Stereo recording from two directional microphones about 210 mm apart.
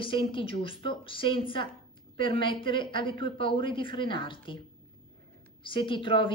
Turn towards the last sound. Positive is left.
turn(degrees=25)  # may be behind; listen again after turning